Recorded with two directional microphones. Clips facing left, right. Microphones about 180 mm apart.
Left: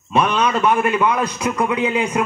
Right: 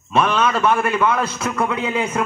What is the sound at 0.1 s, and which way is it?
A man's voice, 20° left (ahead or behind).